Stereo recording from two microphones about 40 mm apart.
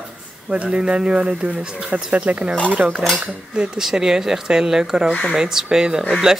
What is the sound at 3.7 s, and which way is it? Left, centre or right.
Speech, centre.